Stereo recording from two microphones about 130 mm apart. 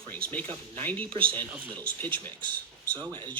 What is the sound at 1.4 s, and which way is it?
Speech, 15° right (ahead or behind).